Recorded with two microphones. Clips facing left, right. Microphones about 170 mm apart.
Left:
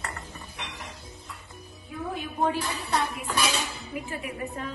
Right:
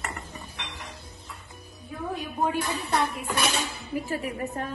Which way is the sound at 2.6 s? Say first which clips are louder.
Right 2 dB; 60° right (ahead or behind).